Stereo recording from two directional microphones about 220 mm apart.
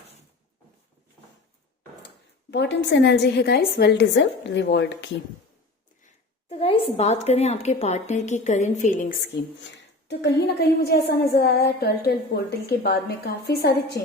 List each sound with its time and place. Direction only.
2.5 s a woman's voice: 50° left (ahead or behind)
6.5 s a woman's voice: 25° left (ahead or behind)
10.1 s a woman's voice: 50° left (ahead or behind)